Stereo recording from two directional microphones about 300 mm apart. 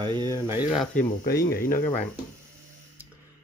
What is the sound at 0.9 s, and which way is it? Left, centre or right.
Speech, left.